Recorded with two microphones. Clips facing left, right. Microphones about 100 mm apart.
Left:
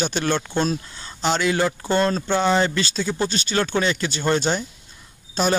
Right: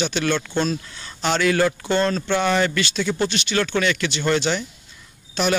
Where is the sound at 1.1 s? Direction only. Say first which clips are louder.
Right 1 dB; 25° left (ahead or behind).